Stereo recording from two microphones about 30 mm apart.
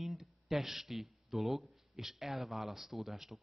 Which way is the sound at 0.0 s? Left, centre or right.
Centre.